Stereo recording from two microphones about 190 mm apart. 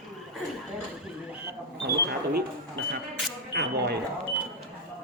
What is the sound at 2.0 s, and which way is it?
Speech, 60° right (ahead or behind).